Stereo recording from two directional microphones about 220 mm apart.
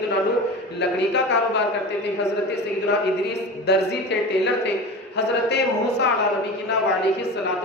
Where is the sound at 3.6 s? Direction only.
50° left (ahead or behind).